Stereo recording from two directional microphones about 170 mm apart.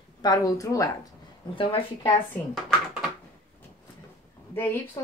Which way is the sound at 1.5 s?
30° left (ahead or behind).